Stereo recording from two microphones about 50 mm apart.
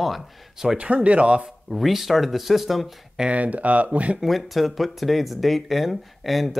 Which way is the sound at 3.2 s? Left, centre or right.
Right.